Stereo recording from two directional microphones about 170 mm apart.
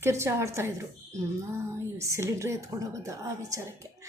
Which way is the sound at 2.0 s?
15° right (ahead or behind).